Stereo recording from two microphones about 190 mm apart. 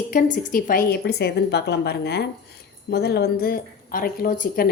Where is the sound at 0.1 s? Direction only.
45° left (ahead or behind).